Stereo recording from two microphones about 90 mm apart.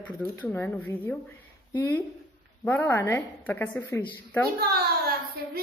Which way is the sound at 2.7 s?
25° left (ahead or behind).